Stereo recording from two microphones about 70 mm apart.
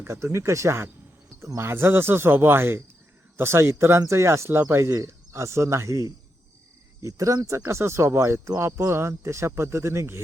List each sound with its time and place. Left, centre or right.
0.1 s speech: right